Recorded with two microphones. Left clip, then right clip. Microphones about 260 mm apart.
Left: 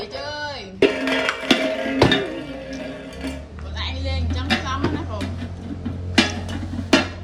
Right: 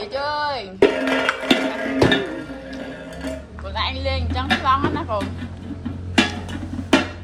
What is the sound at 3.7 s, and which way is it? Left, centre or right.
Music, centre.